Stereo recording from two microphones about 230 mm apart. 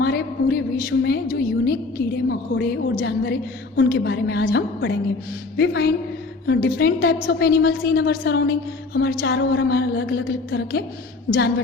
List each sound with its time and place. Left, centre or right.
0.0 s a woman's voice: left